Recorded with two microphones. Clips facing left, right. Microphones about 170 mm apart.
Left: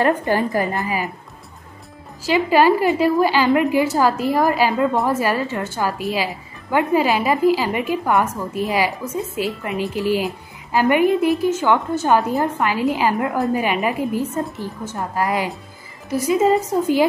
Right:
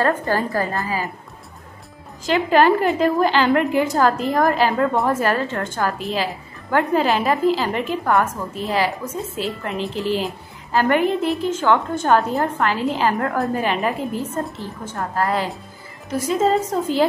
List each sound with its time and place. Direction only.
0.0 s a woman's voice: 15° left (ahead or behind)
2.2 s a woman's voice: 5° left (ahead or behind)